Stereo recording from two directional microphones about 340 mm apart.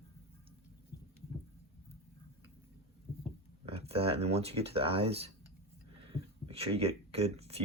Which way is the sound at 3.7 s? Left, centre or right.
Centre.